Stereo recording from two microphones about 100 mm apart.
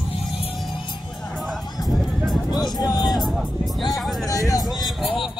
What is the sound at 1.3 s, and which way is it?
Music, centre (ahead or behind).